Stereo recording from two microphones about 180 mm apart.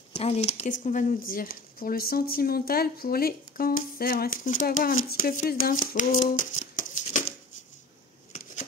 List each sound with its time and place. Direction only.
0.1 s speech: 35° left (ahead or behind)